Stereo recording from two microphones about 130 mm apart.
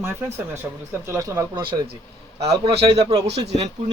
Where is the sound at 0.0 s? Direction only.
20° right (ahead or behind).